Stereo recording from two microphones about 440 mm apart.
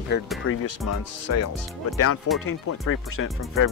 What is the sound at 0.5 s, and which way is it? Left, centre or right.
Speech, left.